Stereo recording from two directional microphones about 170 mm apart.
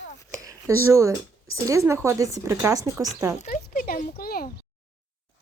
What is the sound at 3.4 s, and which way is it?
Speech, 55° left (ahead or behind).